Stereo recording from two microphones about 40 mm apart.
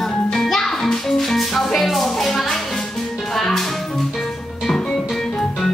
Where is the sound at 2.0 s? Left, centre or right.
Centre.